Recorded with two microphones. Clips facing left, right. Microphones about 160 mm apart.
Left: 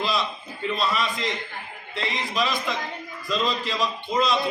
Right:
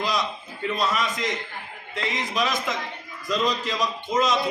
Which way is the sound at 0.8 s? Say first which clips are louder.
Right 1 dB; 20° right (ahead or behind).